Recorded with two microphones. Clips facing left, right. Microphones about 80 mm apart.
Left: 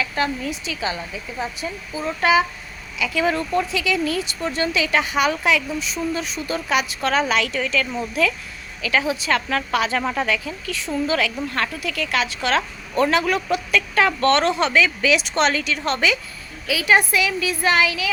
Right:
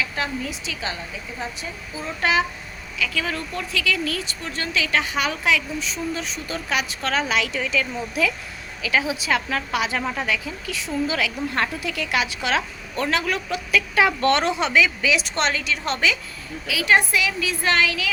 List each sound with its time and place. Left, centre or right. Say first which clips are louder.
0.0 s speech: left 3 dB; centre
3.0 s a woman's voice: left 5 dB; centre
11.5 s a woman's voice: even; right
13.0 s speech: left 5 dB; centre